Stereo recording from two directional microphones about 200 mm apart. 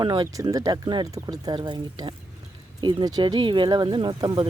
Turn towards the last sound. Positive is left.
turn(degrees=-20)  # may be behind; listen again after turning